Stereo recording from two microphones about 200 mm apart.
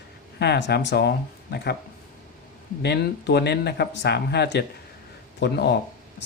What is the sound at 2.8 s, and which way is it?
Speech, 55° left (ahead or behind).